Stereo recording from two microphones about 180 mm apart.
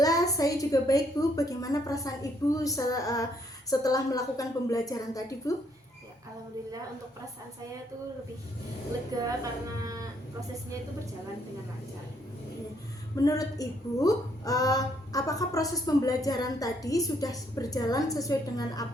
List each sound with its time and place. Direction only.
0.0 s a woman's voice: 20° left (ahead or behind)
9.2 s speech: 20° right (ahead or behind)
13.1 s a woman's voice: 20° left (ahead or behind)